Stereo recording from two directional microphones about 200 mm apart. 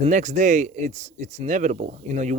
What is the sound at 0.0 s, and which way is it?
Speech, 35° right (ahead or behind).